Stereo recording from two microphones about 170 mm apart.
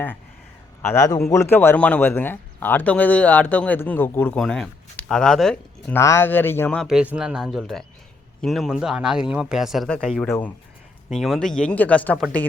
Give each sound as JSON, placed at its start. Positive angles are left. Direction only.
{"t": 0.8, "sound": "speech", "side_deg": 15}
{"t": 5.9, "sound": "speech", "side_deg": 15}
{"t": 6.8, "sound": "speech", "side_deg": -5}